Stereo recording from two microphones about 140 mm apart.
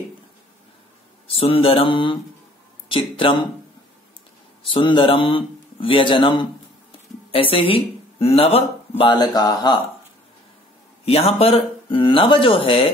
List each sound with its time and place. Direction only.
1.2 s speech: 40° left (ahead or behind)
4.6 s speech: 35° left (ahead or behind)
9.3 s speech: 30° left (ahead or behind)
11.1 s speech: 45° left (ahead or behind)